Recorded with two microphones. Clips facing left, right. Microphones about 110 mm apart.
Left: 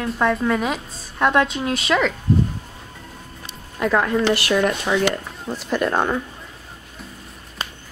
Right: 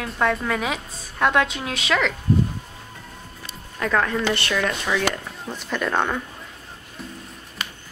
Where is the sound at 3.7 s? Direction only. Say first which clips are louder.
Left 3 dB; 15° left (ahead or behind).